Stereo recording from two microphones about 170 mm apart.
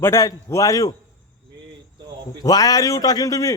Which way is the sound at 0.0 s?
20° left (ahead or behind).